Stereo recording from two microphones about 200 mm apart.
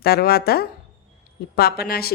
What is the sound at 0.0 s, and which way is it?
Speech, 50° left (ahead or behind).